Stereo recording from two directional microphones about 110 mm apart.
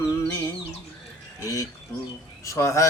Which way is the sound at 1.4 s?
30° left (ahead or behind).